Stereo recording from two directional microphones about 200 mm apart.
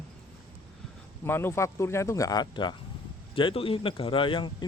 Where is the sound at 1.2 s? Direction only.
10° left (ahead or behind).